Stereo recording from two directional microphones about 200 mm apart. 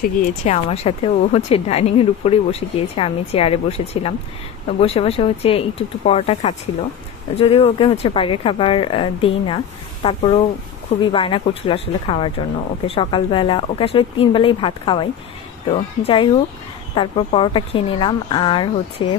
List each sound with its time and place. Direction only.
0.0 s a woman's voice: 40° left (ahead or behind)